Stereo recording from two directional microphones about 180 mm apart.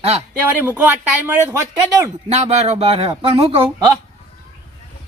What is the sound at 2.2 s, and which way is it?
Speech, 35° right (ahead or behind).